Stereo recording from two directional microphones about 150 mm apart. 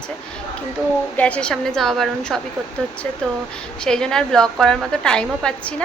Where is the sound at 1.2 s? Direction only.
10° left (ahead or behind).